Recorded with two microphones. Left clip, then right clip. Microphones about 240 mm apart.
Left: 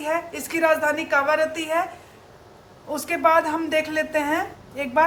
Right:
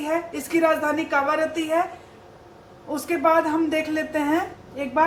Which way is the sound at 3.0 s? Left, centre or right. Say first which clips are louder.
Left 1 dB; left.